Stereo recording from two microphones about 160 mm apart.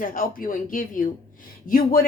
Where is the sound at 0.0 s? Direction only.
60° left (ahead or behind).